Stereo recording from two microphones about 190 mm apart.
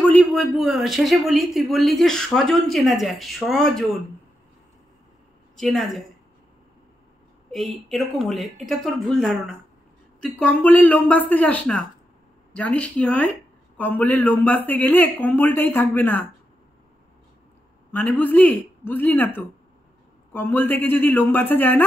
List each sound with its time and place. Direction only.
0.0 s speech: 5° left (ahead or behind)
5.6 s speech: centre (ahead or behind)
7.5 s a man's voice: centre (ahead or behind)
17.9 s a man's voice: 10° left (ahead or behind)